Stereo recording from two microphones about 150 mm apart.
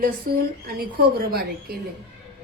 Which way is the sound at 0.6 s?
85° right.